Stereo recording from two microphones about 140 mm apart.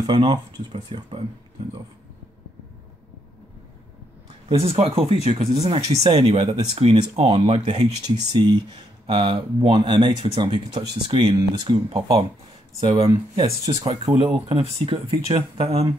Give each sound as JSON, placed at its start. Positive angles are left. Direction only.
{"t": 0.0, "sound": "speech", "side_deg": -35}
{"t": 4.5, "sound": "speech", "side_deg": -45}
{"t": 11.9, "sound": "speech", "side_deg": -45}
{"t": 13.7, "sound": "speech", "side_deg": -40}